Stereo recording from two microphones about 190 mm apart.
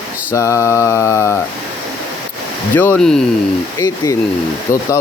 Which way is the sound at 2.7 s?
10° left (ahead or behind).